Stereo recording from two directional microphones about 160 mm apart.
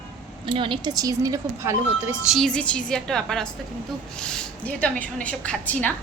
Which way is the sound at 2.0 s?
Centre (ahead or behind).